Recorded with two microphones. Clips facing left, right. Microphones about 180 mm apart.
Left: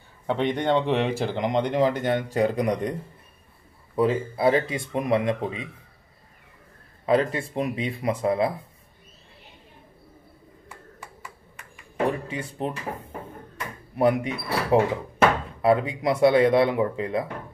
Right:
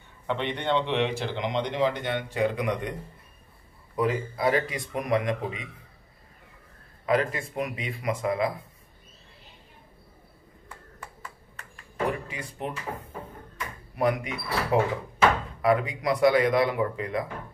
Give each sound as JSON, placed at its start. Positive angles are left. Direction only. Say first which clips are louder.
{"t": 0.3, "sound": "speech", "louder": "left 4 dB", "side_deg": 40}
{"t": 7.1, "sound": "speech", "louder": "left 3 dB", "side_deg": 30}
{"t": 10.7, "sound": "a sound", "louder": "left 1 dB", "side_deg": 10}
{"t": 12.3, "sound": "speech", "louder": "left 5 dB", "side_deg": 30}
{"t": 13.9, "sound": "speech", "louder": "left 4 dB", "side_deg": 30}